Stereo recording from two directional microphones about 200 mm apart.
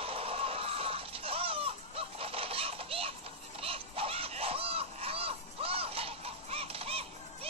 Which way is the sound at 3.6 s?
30° right (ahead or behind).